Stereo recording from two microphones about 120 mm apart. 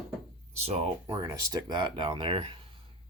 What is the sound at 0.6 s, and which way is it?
Speech, 55° right (ahead or behind).